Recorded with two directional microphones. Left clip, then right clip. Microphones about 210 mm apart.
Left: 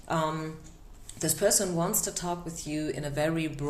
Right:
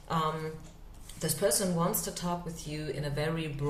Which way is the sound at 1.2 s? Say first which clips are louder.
Left 3 dB; 45° left (ahead or behind).